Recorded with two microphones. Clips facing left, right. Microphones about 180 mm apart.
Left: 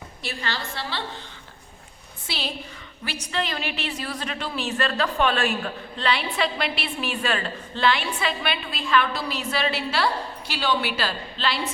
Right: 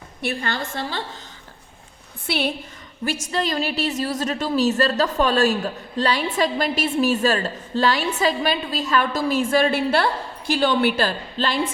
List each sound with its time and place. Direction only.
0.2 s a woman's voice: 55° right (ahead or behind)
2.2 s a woman's voice: 60° right (ahead or behind)
3.0 s a woman's voice: 45° right (ahead or behind)